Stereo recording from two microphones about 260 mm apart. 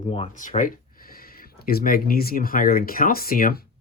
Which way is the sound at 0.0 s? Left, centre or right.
Left.